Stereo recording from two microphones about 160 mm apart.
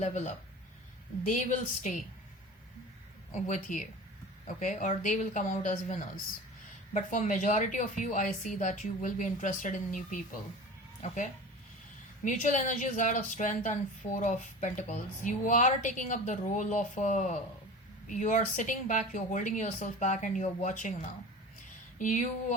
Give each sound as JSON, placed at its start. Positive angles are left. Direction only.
{"t": 0.0, "sound": "a woman's voice", "side_deg": 45}
{"t": 1.3, "sound": "a woman's voice", "side_deg": 50}
{"t": 3.3, "sound": "a woman's voice", "side_deg": 50}